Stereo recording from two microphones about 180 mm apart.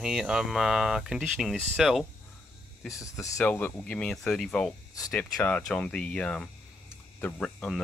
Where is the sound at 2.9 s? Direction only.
15° left (ahead or behind).